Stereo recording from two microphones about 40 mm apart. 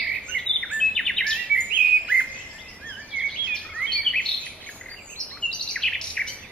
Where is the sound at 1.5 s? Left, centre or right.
Right.